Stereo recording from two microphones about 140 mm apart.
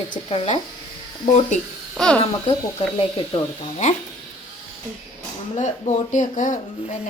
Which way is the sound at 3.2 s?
45° left (ahead or behind).